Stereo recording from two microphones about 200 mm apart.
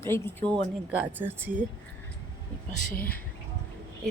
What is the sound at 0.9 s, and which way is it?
Speech, 10° right (ahead or behind).